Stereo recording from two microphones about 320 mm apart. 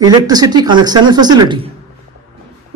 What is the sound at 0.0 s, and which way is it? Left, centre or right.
Speech, centre.